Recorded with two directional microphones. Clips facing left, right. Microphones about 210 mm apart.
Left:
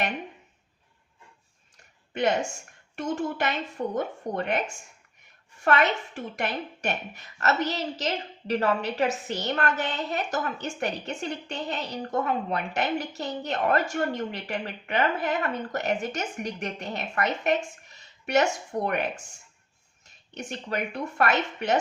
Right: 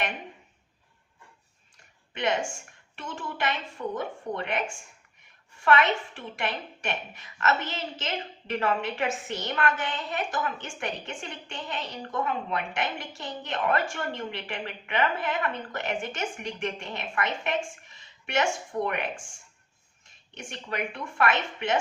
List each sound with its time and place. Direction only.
2.1 s a woman's voice: 40° left (ahead or behind)
5.6 s a woman's voice: 40° left (ahead or behind)
20.3 s a woman's voice: 40° left (ahead or behind)